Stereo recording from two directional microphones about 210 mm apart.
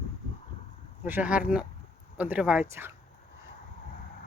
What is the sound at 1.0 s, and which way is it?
Speech, 10° right (ahead or behind).